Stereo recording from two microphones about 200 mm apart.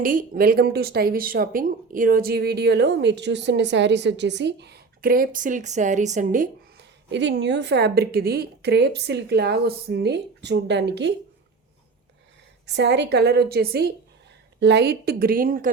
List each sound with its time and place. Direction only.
0.0 s speech: 45° right (ahead or behind)
7.1 s a woman's voice: 60° right (ahead or behind)
12.6 s a woman's voice: 60° right (ahead or behind); by 15.7 s 45° right (ahead or behind)